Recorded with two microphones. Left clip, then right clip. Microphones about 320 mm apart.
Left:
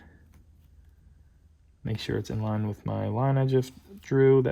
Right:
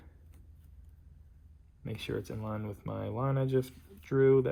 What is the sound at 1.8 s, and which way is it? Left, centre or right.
Speech, left.